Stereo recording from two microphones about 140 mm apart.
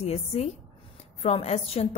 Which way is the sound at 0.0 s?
50° left (ahead or behind).